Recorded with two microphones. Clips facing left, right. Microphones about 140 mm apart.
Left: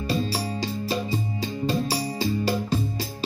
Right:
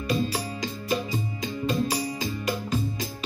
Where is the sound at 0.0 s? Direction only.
35° left (ahead or behind).